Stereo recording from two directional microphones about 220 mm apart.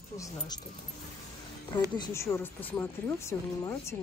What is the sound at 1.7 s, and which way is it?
A woman's voice, 20° left (ahead or behind).